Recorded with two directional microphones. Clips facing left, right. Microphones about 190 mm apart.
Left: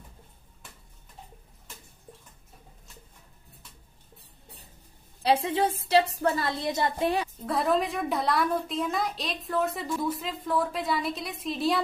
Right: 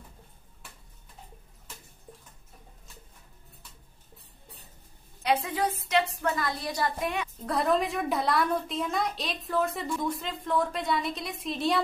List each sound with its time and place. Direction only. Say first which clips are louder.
5.2 s a woman's voice: left 3 dB; 30° left (ahead or behind)
7.3 s a woman's voice: even; centre (ahead or behind)